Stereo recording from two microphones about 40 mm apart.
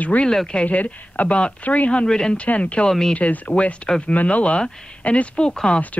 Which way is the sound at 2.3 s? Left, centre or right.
Left.